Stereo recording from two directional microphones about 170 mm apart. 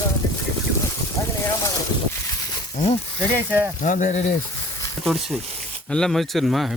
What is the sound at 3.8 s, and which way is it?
Speech, 50° left (ahead or behind).